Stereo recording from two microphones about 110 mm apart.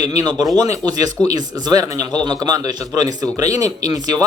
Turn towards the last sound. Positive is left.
turn(degrees=-35)  # may be behind; listen again after turning